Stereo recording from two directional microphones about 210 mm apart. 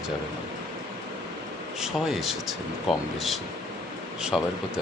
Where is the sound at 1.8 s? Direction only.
Centre (ahead or behind).